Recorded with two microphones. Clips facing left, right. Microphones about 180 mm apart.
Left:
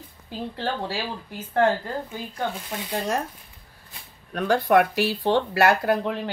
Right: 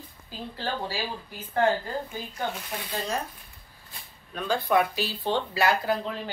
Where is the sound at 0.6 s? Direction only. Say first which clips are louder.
Left 2 dB; 60° left (ahead or behind).